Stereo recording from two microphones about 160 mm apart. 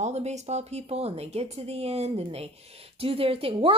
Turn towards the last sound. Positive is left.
turn(degrees=-35)  # may be behind; listen again after turning